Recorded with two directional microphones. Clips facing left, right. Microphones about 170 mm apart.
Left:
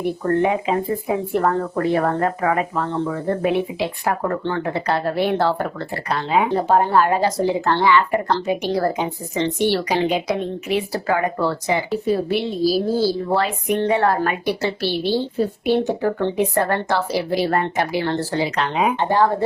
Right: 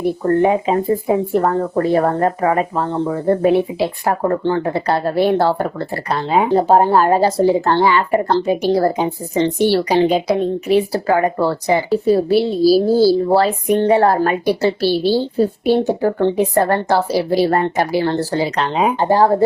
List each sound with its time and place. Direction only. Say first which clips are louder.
0.3 s speech: right 4 dB; 35° right (ahead or behind)